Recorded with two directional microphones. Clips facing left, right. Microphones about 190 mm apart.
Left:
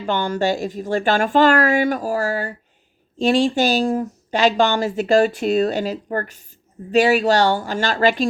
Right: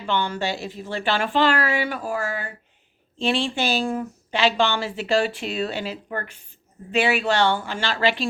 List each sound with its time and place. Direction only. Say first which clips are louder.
0.0 s a woman's voice: left 5 dB; 45° left (ahead or behind)